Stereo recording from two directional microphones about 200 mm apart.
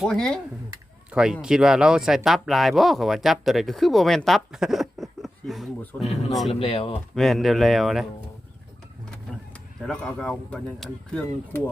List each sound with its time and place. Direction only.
0.0 s speech: 5° left (ahead or behind)
6.0 s speech: 30° left (ahead or behind)
7.2 s speech: centre (ahead or behind)
9.3 s vehicle: 5° left (ahead or behind)
9.8 s speech: 5° left (ahead or behind)